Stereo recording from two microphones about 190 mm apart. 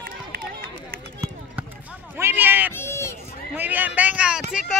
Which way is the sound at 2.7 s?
15° left (ahead or behind).